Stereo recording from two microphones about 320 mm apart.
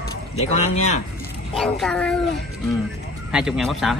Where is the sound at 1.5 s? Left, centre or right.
Centre.